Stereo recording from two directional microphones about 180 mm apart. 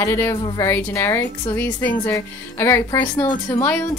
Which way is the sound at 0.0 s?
15° left (ahead or behind).